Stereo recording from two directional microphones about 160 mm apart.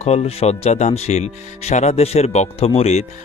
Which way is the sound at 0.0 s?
40° left (ahead or behind).